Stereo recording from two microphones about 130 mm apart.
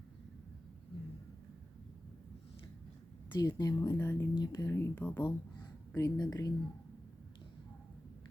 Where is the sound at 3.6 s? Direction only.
30° left (ahead or behind).